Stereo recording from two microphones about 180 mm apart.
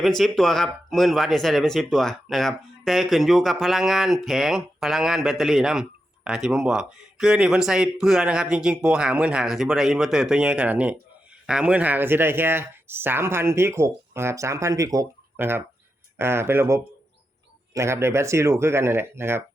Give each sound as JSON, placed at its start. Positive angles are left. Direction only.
{"t": 0.0, "sound": "speech", "side_deg": 0}